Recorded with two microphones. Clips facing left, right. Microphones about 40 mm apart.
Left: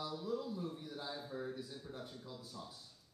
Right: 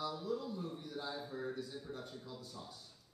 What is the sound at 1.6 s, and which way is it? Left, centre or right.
A man's voice, centre.